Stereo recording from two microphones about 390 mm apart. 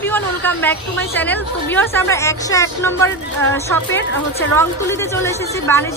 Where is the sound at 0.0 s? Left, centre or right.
Centre.